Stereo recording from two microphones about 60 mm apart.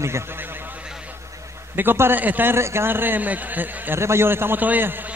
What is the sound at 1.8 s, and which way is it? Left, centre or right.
Speech, right.